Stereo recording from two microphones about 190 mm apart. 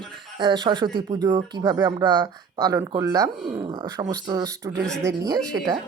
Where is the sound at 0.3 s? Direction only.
25° right (ahead or behind).